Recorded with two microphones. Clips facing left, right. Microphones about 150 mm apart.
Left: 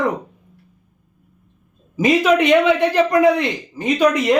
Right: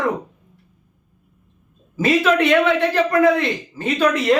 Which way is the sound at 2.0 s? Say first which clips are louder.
Left 2 dB; 15° left (ahead or behind).